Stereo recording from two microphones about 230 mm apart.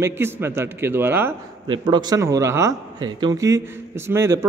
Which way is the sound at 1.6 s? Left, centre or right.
Centre.